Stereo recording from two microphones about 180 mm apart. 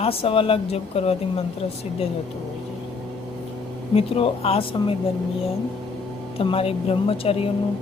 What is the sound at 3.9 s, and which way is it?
Speech, 35° left (ahead or behind).